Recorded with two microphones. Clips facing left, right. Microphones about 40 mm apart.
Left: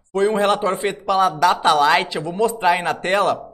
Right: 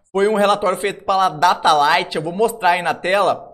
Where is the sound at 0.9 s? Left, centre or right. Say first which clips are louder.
Right 1 dB; centre.